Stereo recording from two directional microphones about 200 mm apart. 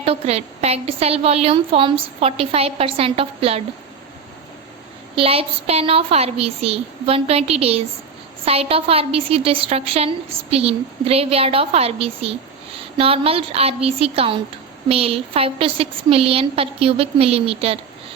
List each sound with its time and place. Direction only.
0.0 s a woman's voice: 30° right (ahead or behind)
5.1 s a woman's voice: 30° right (ahead or behind)